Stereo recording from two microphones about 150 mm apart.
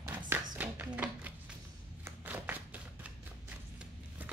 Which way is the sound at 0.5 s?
10° right (ahead or behind).